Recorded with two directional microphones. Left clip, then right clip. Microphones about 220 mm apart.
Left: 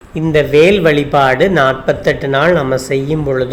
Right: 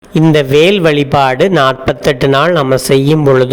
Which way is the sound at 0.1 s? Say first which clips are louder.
Right 3 dB; 35° right (ahead or behind).